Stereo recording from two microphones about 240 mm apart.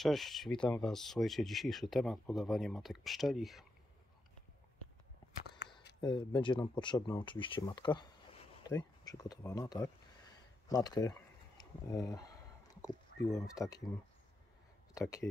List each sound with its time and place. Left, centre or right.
0.0 s speech: centre
5.9 s speech: centre
15.0 s speech: centre